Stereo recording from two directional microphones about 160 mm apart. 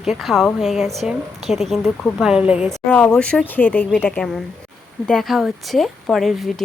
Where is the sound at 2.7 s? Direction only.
10° left (ahead or behind).